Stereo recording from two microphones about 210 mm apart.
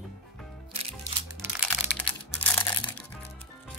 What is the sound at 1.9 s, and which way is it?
Computer keyboard, 5° left (ahead or behind).